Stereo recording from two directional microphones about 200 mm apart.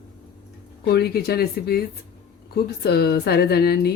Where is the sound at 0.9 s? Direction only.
50° left (ahead or behind).